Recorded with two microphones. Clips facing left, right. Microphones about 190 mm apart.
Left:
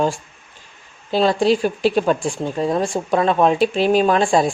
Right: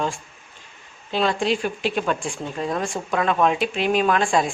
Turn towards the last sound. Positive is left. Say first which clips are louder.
# left 4 dB
turn(degrees=35)  # may be behind; listen again after turning